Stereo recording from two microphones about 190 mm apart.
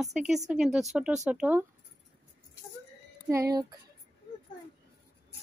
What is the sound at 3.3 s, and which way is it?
Speech, 15° right (ahead or behind).